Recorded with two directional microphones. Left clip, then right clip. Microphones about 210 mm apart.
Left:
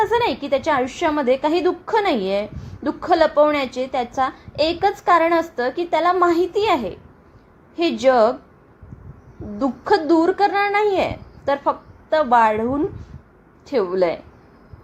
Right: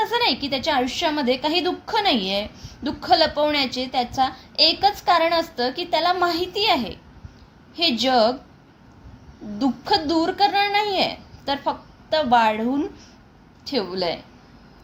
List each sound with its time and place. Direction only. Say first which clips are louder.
0.0 s a woman's voice: left 2 dB; 20° left (ahead or behind)
9.6 s a woman's voice: left 3 dB; 20° left (ahead or behind)